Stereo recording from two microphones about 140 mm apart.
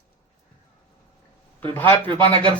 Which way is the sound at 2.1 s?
35° right (ahead or behind).